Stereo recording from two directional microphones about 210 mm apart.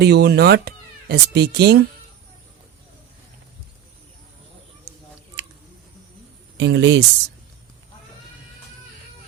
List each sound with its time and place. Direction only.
0.0 s speech: 50° right (ahead or behind)
6.6 s speech: 55° right (ahead or behind)